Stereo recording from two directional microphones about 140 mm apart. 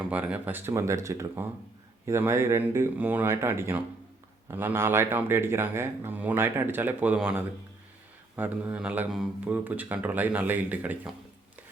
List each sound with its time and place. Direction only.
0.0 s speech: 10° right (ahead or behind)